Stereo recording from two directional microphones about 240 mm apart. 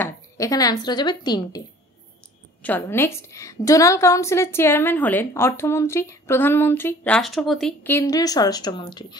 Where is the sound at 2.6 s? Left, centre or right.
Centre.